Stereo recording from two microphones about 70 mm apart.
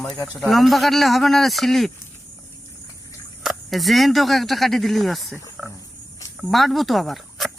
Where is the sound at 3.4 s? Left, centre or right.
Centre.